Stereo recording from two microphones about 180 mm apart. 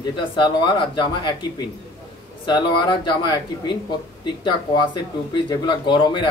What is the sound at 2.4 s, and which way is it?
Speech, 25° left (ahead or behind).